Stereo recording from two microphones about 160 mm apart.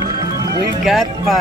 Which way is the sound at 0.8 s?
Centre (ahead or behind).